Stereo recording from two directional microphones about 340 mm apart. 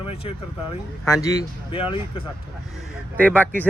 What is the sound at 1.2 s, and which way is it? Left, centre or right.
Speech, centre.